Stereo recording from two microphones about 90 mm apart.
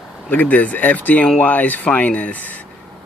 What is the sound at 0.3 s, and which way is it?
Speech, 20° left (ahead or behind).